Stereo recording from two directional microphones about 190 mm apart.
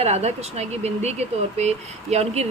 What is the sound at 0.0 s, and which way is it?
Speech, 35° right (ahead or behind).